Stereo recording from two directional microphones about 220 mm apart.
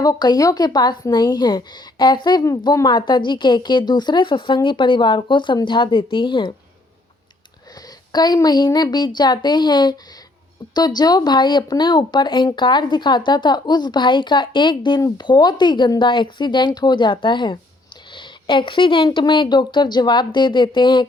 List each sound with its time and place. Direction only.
0.0 s speech: 15° left (ahead or behind)
7.8 s speech: 15° left (ahead or behind)